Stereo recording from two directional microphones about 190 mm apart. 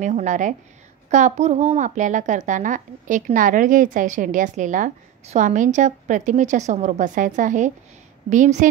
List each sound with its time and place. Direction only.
0.0 s a child's voice: 40° right (ahead or behind)